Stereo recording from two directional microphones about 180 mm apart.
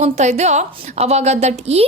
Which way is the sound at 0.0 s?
40° right (ahead or behind).